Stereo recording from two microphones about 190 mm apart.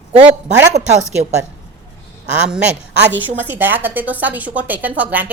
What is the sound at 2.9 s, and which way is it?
Speech, 60° right (ahead or behind).